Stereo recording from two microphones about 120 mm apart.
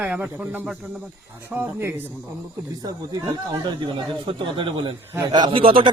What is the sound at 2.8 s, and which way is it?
Speech, 35° right (ahead or behind).